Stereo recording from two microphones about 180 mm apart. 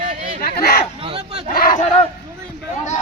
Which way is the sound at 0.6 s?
55° left (ahead or behind).